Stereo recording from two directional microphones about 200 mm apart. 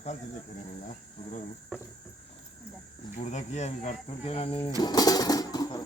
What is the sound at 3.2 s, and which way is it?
Speech, 35° left (ahead or behind).